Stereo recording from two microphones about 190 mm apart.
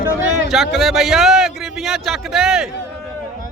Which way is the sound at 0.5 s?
Centre (ahead or behind).